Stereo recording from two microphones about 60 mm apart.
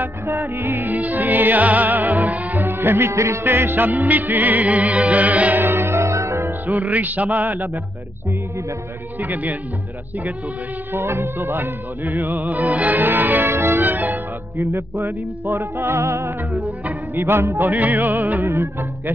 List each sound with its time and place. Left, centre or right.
0.0 s music: right
5.8 s music: right
6.6 s music: right
9.2 s music: right
10.9 s music: right
13.8 s music: right
15.0 s music: right
17.6 s music: right